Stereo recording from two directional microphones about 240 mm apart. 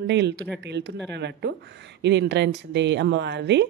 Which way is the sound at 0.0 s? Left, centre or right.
Right.